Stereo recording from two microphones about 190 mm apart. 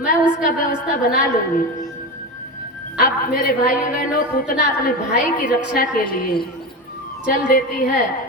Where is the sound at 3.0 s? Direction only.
45° left (ahead or behind).